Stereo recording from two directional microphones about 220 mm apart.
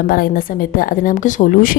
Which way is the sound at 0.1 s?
40° left (ahead or behind).